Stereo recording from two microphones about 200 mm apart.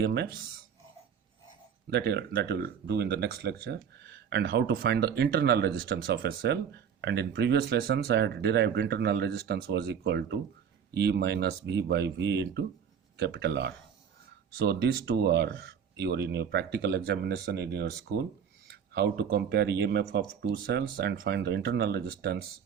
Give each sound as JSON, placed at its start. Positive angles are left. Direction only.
{"t": 0.0, "sound": "speech", "side_deg": -55}
{"t": 1.9, "sound": "speech", "side_deg": -55}